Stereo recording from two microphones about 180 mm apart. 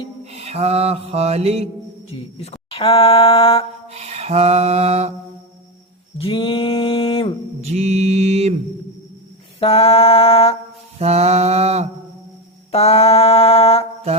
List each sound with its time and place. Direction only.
0.3 s music: 35° right (ahead or behind)
2.0 s speech: 35° left (ahead or behind)
3.8 s music: 35° right (ahead or behind)
6.1 s a sound: 30° left (ahead or behind)
7.6 s mantra: 35° right (ahead or behind)
9.6 s mantra: 35° left (ahead or behind)
11.0 s mantra: 35° right (ahead or behind)
12.7 s mantra: 35° left (ahead or behind)